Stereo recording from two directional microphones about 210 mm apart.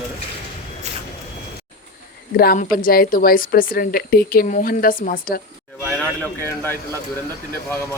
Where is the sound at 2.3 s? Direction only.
45° left (ahead or behind).